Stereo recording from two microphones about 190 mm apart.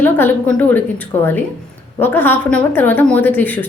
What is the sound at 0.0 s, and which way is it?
A woman's voice, 10° left (ahead or behind).